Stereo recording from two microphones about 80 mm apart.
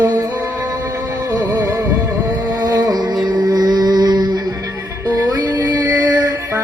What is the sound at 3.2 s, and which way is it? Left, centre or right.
Mantra, right.